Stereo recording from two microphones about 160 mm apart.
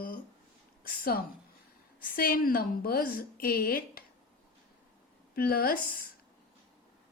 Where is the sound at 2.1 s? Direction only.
65° left (ahead or behind).